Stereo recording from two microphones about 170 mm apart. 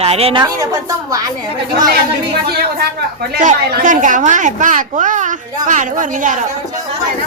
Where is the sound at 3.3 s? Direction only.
65° right (ahead or behind); by 6.5 s 50° right (ahead or behind).